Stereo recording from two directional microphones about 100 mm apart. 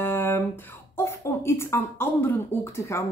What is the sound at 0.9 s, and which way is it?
Speech, 25° left (ahead or behind).